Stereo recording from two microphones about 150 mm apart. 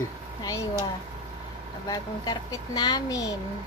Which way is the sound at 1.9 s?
25° left (ahead or behind).